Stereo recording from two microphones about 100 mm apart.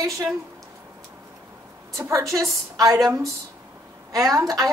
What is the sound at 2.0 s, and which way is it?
A woman's voice, 30° right (ahead or behind).